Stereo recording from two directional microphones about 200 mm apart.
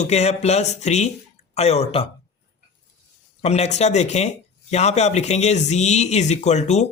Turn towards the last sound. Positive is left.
turn(degrees=35)  # may be behind; listen again after turning